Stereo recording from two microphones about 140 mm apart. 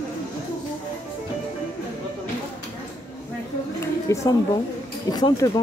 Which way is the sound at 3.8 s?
20° left (ahead or behind).